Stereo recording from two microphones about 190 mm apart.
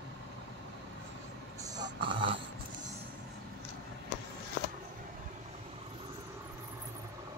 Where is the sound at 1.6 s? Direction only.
20° right (ahead or behind).